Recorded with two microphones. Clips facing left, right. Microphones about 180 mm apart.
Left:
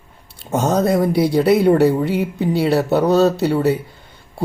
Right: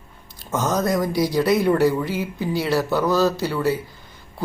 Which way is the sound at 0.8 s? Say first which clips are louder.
Left 5 dB; 65° left (ahead or behind).